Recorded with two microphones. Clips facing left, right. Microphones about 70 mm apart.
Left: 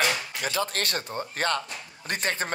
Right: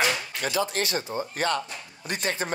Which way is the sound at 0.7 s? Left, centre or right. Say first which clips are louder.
Right 2 dB; left.